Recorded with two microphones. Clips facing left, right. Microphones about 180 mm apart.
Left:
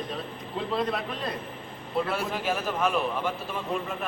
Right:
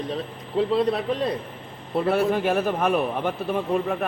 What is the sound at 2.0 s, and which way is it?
A man's voice, 55° right (ahead or behind).